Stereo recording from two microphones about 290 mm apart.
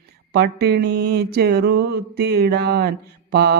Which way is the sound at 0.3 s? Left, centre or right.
Right.